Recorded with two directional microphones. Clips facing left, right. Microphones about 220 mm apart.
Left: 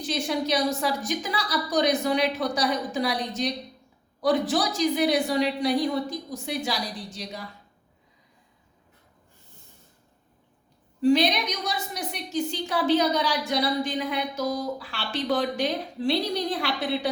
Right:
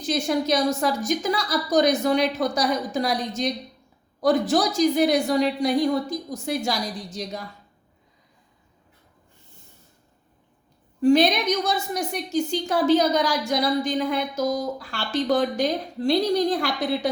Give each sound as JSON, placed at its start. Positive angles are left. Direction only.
{"t": 0.1, "sound": "a woman's voice", "side_deg": -45}
{"t": 11.0, "sound": "a woman's voice", "side_deg": -50}